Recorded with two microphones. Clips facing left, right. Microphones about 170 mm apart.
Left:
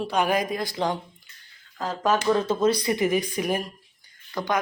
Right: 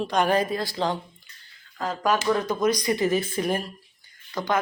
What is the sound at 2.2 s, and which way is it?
Speech, 25° left (ahead or behind).